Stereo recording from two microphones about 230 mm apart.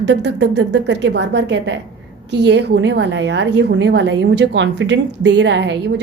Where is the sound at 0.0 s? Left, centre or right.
Right.